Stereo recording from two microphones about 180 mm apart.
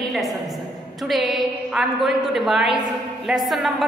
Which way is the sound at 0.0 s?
Centre (ahead or behind).